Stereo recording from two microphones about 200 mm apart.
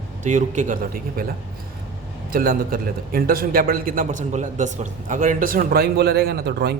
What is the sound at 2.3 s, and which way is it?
A man's voice, 45° right (ahead or behind).